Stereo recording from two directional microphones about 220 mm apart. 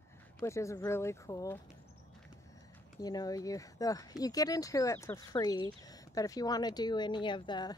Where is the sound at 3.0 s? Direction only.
15° left (ahead or behind).